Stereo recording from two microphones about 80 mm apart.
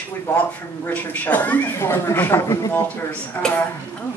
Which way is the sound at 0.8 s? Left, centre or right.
Left.